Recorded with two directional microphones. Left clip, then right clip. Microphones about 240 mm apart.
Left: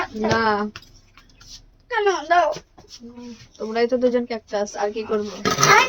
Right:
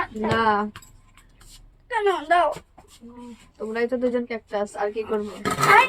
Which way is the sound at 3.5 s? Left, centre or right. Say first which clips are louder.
Left 4 dB; centre.